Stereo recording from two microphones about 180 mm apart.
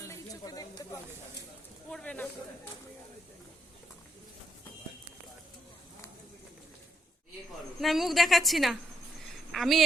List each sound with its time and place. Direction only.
0.0 s a sound: 20° left (ahead or behind)
1.9 s speech: 5° left (ahead or behind)
7.8 s a woman's voice: centre (ahead or behind)